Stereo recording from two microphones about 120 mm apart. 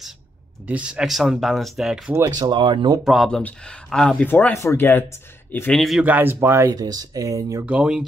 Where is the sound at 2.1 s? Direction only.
30° right (ahead or behind).